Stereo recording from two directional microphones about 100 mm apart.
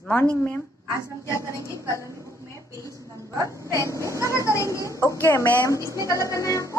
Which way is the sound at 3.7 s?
30° left (ahead or behind).